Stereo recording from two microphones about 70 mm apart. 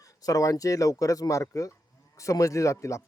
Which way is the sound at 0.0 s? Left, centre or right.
Left.